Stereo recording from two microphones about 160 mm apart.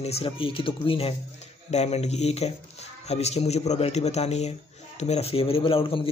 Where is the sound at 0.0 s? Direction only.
40° left (ahead or behind).